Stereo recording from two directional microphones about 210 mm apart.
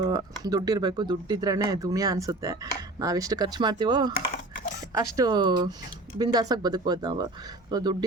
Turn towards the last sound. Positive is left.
turn(degrees=-20)  # may be behind; listen again after turning